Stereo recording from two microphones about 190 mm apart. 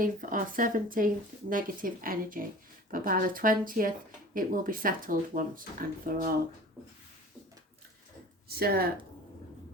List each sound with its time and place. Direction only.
0.0 s speech: 45° right (ahead or behind)
8.4 s speech: 55° right (ahead or behind)